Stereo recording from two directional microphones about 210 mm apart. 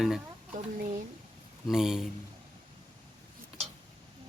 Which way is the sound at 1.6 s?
Centre (ahead or behind).